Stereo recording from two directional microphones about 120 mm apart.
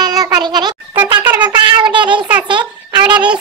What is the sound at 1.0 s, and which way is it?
Wind instrument, 15° right (ahead or behind).